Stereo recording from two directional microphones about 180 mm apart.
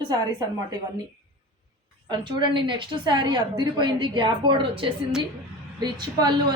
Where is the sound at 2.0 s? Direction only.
25° right (ahead or behind).